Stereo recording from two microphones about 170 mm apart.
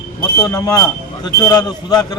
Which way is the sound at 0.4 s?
20° left (ahead or behind).